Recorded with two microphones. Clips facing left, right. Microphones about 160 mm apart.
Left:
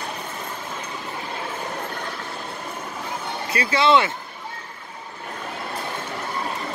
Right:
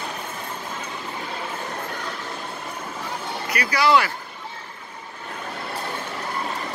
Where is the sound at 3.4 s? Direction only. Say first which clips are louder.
Left 1 dB; 25° left (ahead or behind).